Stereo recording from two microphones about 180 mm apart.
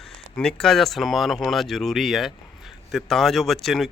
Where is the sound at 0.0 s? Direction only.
5° left (ahead or behind).